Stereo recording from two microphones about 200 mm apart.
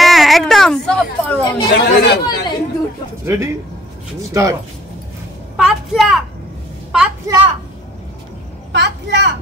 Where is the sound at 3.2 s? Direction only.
15° right (ahead or behind).